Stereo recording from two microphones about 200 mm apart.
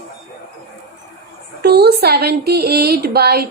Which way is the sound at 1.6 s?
55° right (ahead or behind).